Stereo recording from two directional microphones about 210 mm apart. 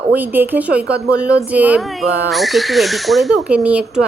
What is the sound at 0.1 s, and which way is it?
A woman's voice, 10° right (ahead or behind).